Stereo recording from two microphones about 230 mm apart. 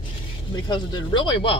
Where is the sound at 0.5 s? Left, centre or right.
Centre.